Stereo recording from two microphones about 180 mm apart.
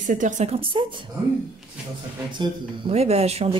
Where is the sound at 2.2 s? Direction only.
30° right (ahead or behind).